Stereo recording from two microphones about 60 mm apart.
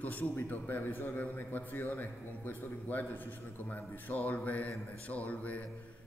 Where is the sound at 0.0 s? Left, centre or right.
Left.